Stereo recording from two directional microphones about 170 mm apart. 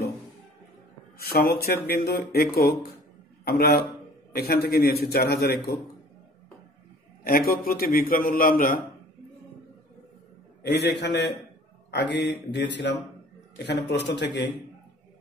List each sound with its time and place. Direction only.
1.1 s a man's voice: 65° left (ahead or behind)
7.2 s a man's voice: 60° left (ahead or behind)
10.6 s a man's voice: 75° left (ahead or behind)